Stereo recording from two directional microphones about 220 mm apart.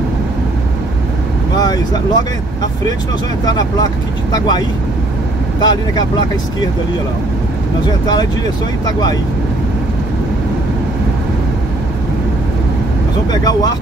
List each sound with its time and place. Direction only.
1.6 s vehicle: 20° left (ahead or behind)
3.4 s speech: 20° left (ahead or behind)
13.3 s speech: 15° left (ahead or behind)